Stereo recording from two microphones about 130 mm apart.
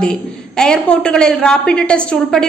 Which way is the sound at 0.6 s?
5° left (ahead or behind).